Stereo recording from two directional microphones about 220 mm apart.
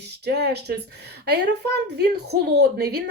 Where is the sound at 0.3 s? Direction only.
50° right (ahead or behind).